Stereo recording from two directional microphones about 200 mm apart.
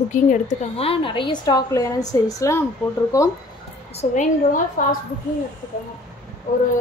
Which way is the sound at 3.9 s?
35° left (ahead or behind).